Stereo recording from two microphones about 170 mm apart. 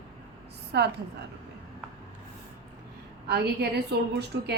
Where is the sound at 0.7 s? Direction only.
80° right.